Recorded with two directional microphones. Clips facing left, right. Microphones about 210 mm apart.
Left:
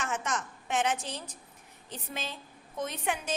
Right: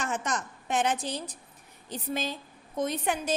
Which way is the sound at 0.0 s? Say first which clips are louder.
Right 2 dB; 35° right (ahead or behind).